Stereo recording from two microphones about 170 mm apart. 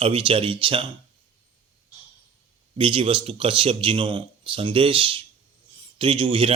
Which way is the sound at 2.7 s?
30° right (ahead or behind).